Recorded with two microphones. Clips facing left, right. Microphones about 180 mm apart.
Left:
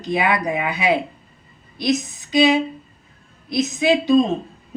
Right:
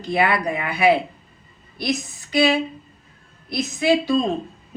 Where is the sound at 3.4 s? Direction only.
20° left (ahead or behind).